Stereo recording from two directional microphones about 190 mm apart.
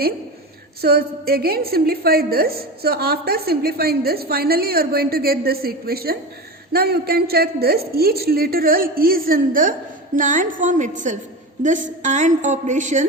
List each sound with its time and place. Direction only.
0.8 s a woman's voice: 55° right (ahead or behind)